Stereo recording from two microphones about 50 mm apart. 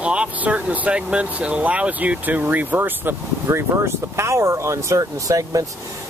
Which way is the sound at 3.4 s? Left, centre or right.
Right.